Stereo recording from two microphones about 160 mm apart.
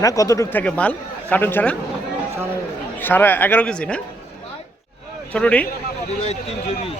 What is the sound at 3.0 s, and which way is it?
A man's voice, 10° left (ahead or behind).